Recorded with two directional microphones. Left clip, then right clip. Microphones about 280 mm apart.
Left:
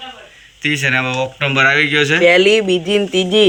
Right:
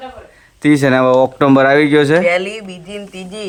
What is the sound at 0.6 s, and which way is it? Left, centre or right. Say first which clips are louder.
Speech: right 5 dB; right.